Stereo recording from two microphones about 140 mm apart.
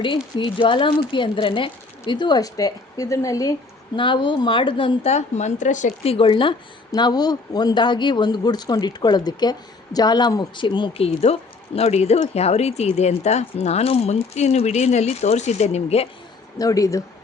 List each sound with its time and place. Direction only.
0.0 s a woman's voice: 35° left (ahead or behind)
3.9 s a woman's voice: 35° left (ahead or behind)
5.1 s speech: 55° left (ahead or behind)
6.9 s speech: 30° left (ahead or behind); by 16.0 s 50° left (ahead or behind)
16.6 s speech: 25° left (ahead or behind)